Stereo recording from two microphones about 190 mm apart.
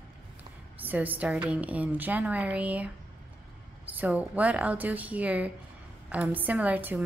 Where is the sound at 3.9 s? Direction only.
10° right (ahead or behind).